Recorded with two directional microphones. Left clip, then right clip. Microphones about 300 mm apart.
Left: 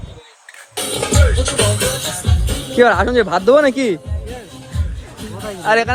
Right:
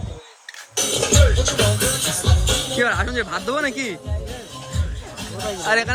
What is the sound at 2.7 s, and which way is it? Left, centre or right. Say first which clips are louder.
Speech: left 12 dB; centre.